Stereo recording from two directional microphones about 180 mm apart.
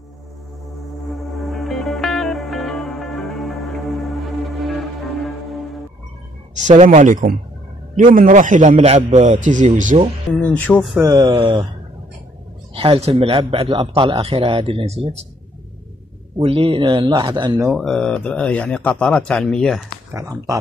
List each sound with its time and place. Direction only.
1.3 s music: centre (ahead or behind)
6.5 s a man's voice: 40° right (ahead or behind)
10.5 s speech: 5° left (ahead or behind)
11.0 s speech: 20° right (ahead or behind)
12.7 s speech: 35° right (ahead or behind)
16.3 s speech: 35° right (ahead or behind)
17.7 s speech: 5° left (ahead or behind)
20.1 s speech: 20° right (ahead or behind)